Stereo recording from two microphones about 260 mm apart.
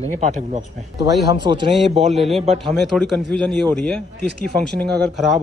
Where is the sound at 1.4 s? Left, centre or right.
Centre.